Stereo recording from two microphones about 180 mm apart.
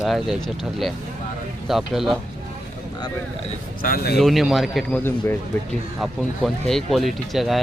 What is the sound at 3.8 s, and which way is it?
Speech, 60° left (ahead or behind).